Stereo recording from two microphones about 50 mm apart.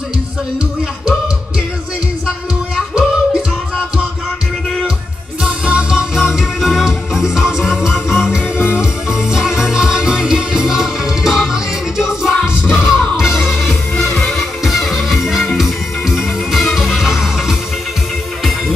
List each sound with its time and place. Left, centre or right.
2.2 s music: centre
5.4 s music: right
6.1 s music: centre
13.9 s music: centre